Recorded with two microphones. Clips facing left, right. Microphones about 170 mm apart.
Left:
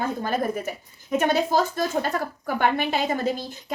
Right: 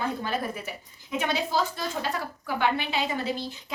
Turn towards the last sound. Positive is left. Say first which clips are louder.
# left 4 dB
turn(degrees=45)  # may be behind; listen again after turning